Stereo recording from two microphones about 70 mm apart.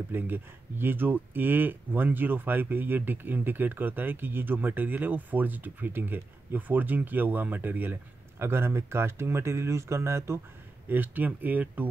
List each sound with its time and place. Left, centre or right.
0.1 s speech: right
10.9 s speech: right